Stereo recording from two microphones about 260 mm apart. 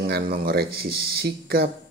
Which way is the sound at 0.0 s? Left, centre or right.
Right.